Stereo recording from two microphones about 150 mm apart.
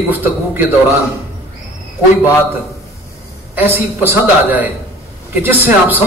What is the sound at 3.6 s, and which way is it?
A man's voice, 15° right (ahead or behind).